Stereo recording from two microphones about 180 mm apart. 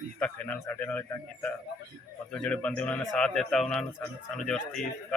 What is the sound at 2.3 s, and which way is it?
A man's voice, 5° left (ahead or behind).